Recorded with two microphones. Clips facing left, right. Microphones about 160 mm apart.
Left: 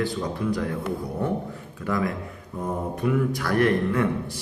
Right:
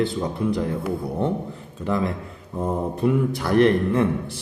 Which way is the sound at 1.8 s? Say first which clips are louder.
Right 2 dB; 25° right (ahead or behind).